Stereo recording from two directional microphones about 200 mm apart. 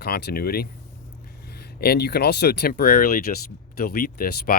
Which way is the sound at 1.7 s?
50° left (ahead or behind).